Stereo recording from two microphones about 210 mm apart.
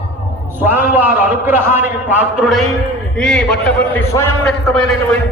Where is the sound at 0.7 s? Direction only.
10° right (ahead or behind).